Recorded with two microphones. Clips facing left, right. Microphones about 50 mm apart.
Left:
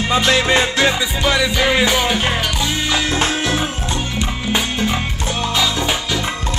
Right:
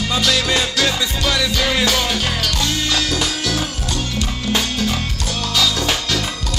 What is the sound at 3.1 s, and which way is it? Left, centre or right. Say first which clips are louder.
Music: left 3 dB; left.